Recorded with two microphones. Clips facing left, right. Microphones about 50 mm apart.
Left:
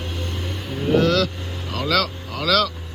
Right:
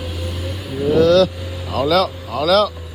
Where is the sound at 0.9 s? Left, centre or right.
Left.